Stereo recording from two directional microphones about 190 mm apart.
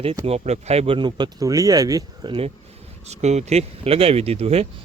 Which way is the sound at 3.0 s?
35° right (ahead or behind).